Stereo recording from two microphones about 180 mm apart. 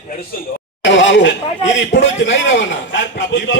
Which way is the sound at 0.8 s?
90° left.